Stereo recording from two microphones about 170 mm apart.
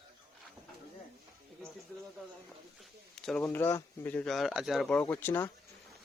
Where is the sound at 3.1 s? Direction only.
5° left (ahead or behind).